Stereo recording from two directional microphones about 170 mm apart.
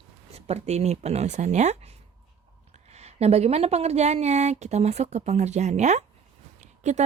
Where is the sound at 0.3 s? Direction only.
35° right (ahead or behind).